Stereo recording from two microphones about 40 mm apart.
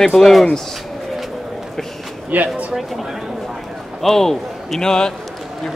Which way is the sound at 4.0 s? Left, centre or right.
Centre.